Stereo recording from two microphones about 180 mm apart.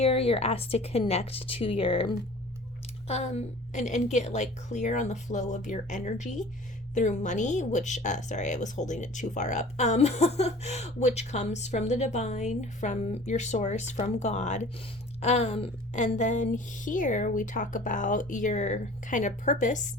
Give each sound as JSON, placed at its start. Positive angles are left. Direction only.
{"t": 0.0, "sound": "a woman's voice", "side_deg": 30}